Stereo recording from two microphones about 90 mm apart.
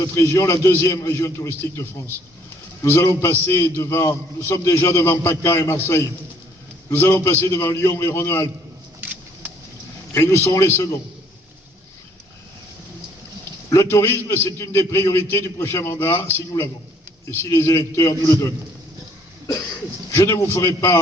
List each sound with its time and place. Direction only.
0.0 s a man's voice: 35° left (ahead or behind)
9.0 s a sound: 20° right (ahead or behind)
10.2 s a man's voice: 30° left (ahead or behind)
13.9 s a man's voice: 30° left (ahead or behind)
17.4 s a man's voice: 35° left (ahead or behind)
20.1 s a man's voice: 35° left (ahead or behind)